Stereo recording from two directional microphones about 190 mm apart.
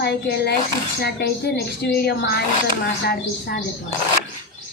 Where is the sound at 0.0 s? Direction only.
60° left (ahead or behind).